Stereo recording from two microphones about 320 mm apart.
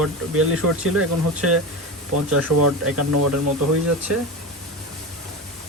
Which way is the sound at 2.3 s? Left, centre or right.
Right.